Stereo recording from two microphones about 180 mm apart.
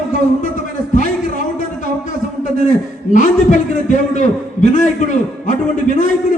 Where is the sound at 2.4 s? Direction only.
45° left (ahead or behind).